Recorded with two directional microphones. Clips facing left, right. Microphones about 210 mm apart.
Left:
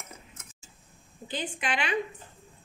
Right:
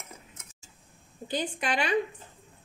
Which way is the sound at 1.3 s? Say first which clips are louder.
Right 2 dB; 40° right (ahead or behind).